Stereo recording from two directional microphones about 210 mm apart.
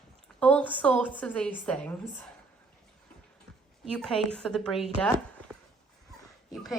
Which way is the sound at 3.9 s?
5° left (ahead or behind).